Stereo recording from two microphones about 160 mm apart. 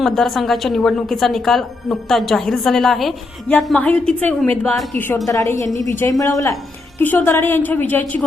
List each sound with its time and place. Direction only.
0.0 s a woman's voice: centre (ahead or behind)
5.0 s a woman's voice: 20° left (ahead or behind)